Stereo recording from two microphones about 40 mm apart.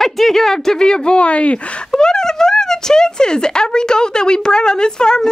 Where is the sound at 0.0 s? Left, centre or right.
Centre; by 1.9 s left.